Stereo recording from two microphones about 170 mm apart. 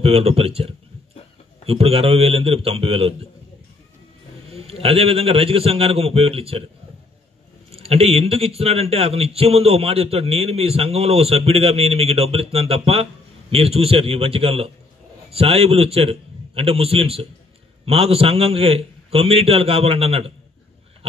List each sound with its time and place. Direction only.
0.0 s speech: 35° right (ahead or behind)
4.5 s speech: 35° right (ahead or behind)
7.7 s speech: 35° right (ahead or behind)